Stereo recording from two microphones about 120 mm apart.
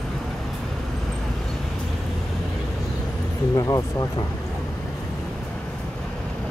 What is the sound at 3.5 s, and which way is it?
Speech, 30° left (ahead or behind).